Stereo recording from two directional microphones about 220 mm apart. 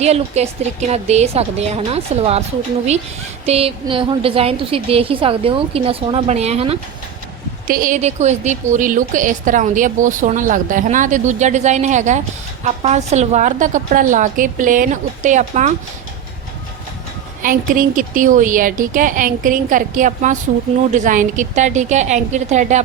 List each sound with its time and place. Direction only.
0.0 s a woman's voice: 30° right (ahead or behind)
3.4 s a woman's voice: 25° right (ahead or behind)
17.4 s a woman's voice: 40° right (ahead or behind)